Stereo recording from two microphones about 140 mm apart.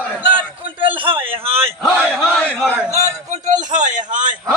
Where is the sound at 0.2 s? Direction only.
40° right (ahead or behind).